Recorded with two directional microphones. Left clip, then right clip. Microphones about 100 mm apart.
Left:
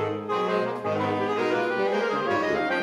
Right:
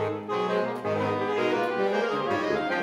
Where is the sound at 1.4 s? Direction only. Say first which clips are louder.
Right 1 dB; 10° left (ahead or behind).